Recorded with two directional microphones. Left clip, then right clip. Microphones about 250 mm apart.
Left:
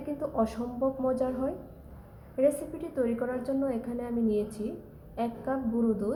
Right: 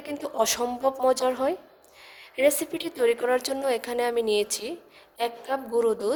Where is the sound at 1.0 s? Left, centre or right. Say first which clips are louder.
Right 8 dB; right.